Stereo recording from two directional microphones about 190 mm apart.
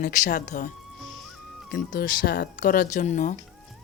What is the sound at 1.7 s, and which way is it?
Speech, 45° left (ahead or behind).